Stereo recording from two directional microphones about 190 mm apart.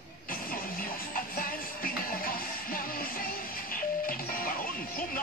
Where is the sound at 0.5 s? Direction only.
50° left (ahead or behind).